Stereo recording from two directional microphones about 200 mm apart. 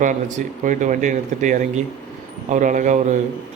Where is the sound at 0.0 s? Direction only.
40° right (ahead or behind).